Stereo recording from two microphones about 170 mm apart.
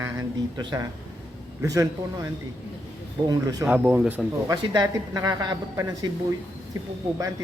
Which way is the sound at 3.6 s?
10° right (ahead or behind).